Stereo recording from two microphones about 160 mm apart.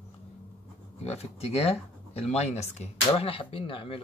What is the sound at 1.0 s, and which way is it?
Speech, 40° left (ahead or behind).